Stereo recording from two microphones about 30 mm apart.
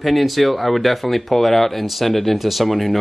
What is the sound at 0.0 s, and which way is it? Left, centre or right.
Speech, centre.